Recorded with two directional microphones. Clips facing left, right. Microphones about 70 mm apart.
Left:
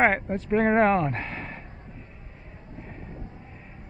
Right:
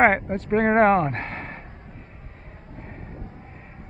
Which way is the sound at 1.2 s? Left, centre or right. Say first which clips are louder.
Right 2 dB; right.